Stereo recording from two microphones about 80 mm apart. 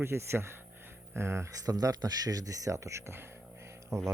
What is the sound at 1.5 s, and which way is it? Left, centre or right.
Speech, right.